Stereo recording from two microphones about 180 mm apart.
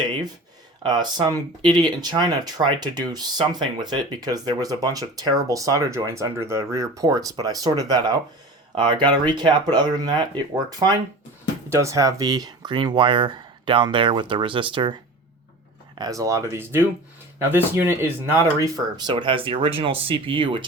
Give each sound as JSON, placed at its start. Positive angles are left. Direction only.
{"t": 0.8, "sound": "speech", "side_deg": -25}
{"t": 16.0, "sound": "speech", "side_deg": -20}
{"t": 18.9, "sound": "speech", "side_deg": -25}